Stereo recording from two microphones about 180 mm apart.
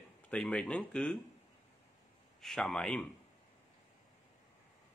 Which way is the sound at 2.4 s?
5° left (ahead or behind).